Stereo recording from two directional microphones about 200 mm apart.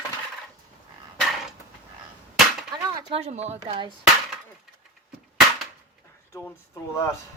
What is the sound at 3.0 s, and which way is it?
Speech, 30° right (ahead or behind).